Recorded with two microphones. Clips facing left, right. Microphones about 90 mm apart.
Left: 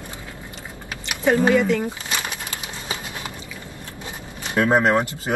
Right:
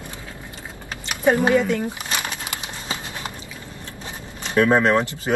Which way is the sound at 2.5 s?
25° right (ahead or behind).